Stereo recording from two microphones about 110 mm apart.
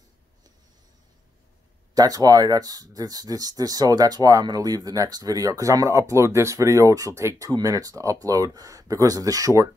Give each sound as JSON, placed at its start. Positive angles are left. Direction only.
{"t": 2.0, "sound": "speech", "side_deg": -35}